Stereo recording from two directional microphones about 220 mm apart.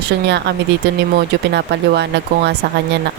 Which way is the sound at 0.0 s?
50° right (ahead or behind).